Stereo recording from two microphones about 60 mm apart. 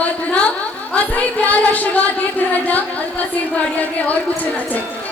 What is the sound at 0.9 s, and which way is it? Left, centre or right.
Speech, left.